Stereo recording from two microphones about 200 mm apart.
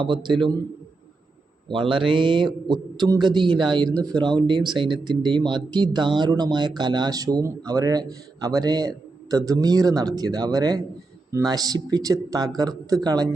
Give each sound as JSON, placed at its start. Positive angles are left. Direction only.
{"t": 0.0, "sound": "speech", "side_deg": -25}
{"t": 1.7, "sound": "speech", "side_deg": -25}